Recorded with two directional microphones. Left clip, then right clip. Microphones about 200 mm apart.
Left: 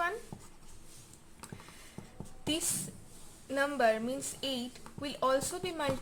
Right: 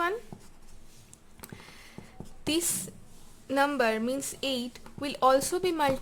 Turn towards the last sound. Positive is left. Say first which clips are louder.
# right 8 dB
turn(degrees=-45)  # may be behind; listen again after turning